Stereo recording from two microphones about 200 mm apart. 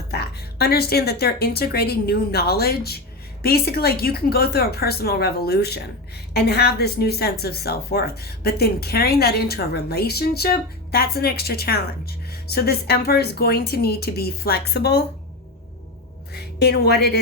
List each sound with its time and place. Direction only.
0.1 s a woman's voice: 55° left (ahead or behind)
16.3 s speech: 55° left (ahead or behind)